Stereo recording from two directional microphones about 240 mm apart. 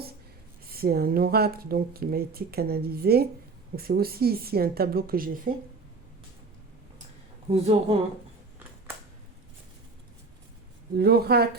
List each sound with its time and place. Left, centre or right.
0.7 s speech: right
7.5 s a woman's voice: right
10.9 s speech: right